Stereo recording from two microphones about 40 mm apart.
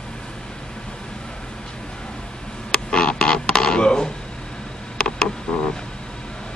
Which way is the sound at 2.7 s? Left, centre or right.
Left.